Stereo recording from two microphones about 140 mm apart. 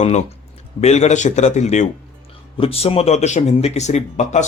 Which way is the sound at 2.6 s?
45° left (ahead or behind).